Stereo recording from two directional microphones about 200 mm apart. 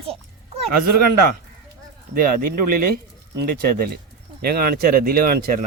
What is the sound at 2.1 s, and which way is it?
Speech, 45° right (ahead or behind).